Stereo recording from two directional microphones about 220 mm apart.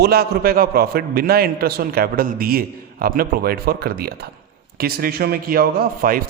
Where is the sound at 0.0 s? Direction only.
45° right (ahead or behind).